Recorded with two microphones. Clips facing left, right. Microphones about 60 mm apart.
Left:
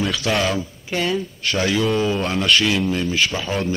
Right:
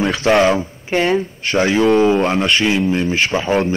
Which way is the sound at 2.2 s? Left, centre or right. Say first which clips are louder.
Right 3 dB; right.